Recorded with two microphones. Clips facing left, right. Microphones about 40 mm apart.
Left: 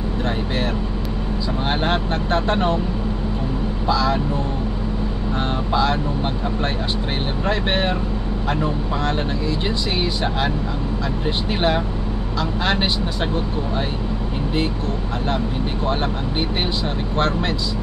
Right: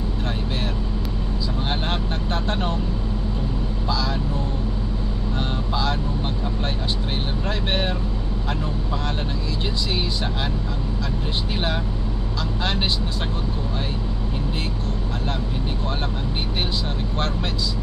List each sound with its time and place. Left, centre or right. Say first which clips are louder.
1.7 s speech: left 7 dB; left
3.8 s speech: left 7 dB; left
5.7 s speech: left 6 dB; left
7.4 s speech: left 5 dB; left
11.2 s speech: left 7 dB; left
15.9 s speech: left 5 dB; left